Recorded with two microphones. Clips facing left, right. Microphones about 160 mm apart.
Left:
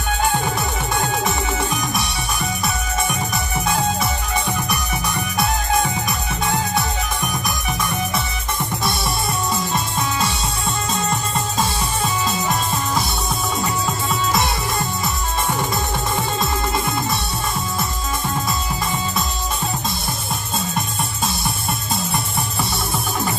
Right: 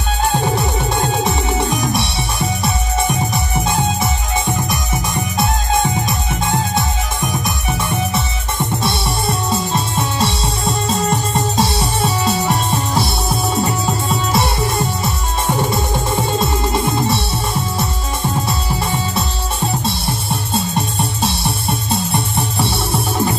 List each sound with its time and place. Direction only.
0.3 s music: 25° right (ahead or behind)
8.8 s music: 25° right (ahead or behind)
15.7 s music: 25° right (ahead or behind)
18.5 s music: 30° right (ahead or behind)